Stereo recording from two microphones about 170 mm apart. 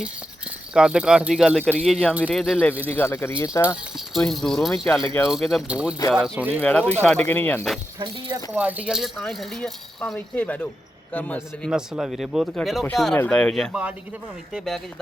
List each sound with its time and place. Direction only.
0.7 s speech: 5° right (ahead or behind)
2.6 s speech: 10° left (ahead or behind)
4.1 s speech: centre (ahead or behind)
6.6 s speech: 10° left (ahead or behind)
7.9 s speech: 25° right (ahead or behind)
8.5 s speech: 10° right (ahead or behind); by 11.7 s 10° left (ahead or behind)
11.7 s speech: centre (ahead or behind)